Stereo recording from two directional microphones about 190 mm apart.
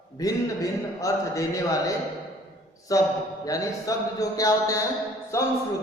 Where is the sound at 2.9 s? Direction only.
15° left (ahead or behind).